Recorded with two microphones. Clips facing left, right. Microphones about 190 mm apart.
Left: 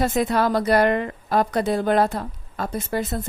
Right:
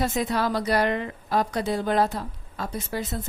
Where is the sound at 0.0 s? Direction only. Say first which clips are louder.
Left 4 dB; 55° left (ahead or behind).